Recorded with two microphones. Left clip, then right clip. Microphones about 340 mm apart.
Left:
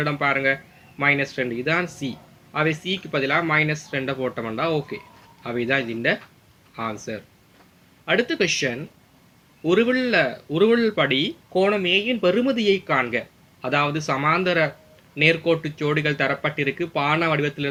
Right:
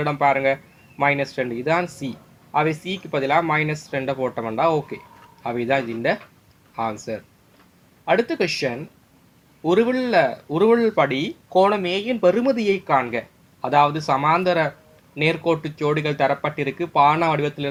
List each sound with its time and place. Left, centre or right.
0.0 s speech: centre